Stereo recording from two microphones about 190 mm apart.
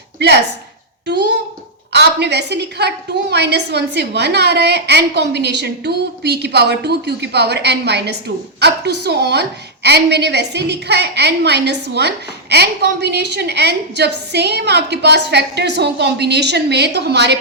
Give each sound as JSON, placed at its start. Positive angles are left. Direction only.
{"t": 1.0, "sound": "a woman's voice", "side_deg": -65}